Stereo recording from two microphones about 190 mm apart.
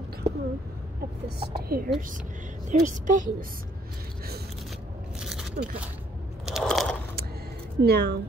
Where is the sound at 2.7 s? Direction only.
40° right (ahead or behind).